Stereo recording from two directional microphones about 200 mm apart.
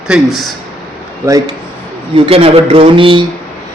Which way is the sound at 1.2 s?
15° right (ahead or behind).